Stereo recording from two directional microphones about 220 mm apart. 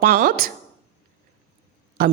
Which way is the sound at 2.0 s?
40° right (ahead or behind).